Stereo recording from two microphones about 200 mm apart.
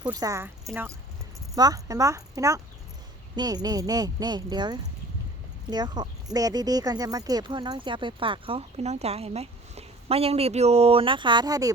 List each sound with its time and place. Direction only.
0.1 s speech: 15° right (ahead or behind)